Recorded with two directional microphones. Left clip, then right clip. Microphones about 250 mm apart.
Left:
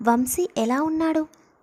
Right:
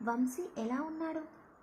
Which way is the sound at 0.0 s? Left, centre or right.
Left.